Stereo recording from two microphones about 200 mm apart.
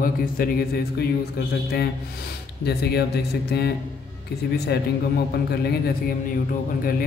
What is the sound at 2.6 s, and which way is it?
Speech, 55° left (ahead or behind).